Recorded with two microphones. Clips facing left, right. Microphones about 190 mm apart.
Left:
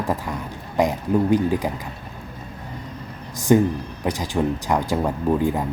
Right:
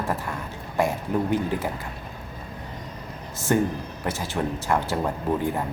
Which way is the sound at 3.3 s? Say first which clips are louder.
Left 6 dB; 15° left (ahead or behind).